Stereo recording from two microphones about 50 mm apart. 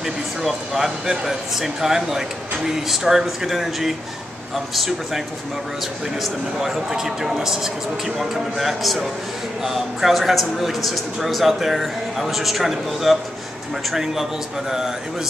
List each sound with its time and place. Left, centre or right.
0.0 s a man's voice: centre
6.2 s a man's voice: centre